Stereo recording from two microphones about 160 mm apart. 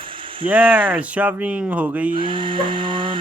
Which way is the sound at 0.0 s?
30° right (ahead or behind).